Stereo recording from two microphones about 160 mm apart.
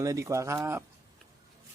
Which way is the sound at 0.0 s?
20° right (ahead or behind).